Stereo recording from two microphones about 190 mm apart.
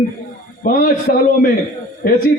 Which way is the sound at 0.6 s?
45° left (ahead or behind).